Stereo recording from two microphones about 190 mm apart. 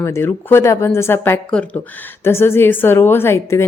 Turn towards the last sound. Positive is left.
turn(degrees=15)  # may be behind; listen again after turning